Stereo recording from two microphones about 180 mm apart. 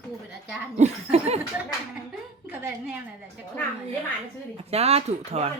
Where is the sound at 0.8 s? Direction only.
35° right (ahead or behind).